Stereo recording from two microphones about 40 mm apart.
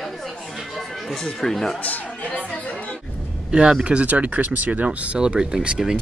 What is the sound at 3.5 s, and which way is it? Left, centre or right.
Speech, right.